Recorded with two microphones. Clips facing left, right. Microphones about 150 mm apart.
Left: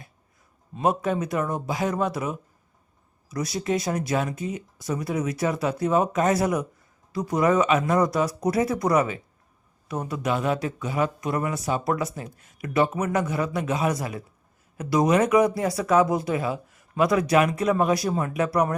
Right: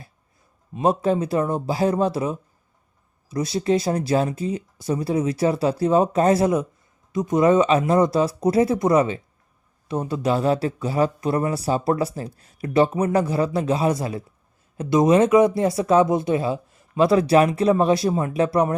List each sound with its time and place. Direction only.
0.8 s speech: 30° right (ahead or behind)